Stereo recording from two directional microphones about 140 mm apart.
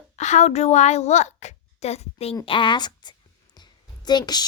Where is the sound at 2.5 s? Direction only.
35° left (ahead or behind).